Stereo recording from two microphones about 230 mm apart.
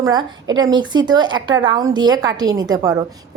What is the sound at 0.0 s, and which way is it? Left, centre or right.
A woman's voice, centre.